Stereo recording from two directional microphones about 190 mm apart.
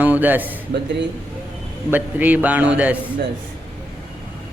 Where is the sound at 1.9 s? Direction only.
10° right (ahead or behind).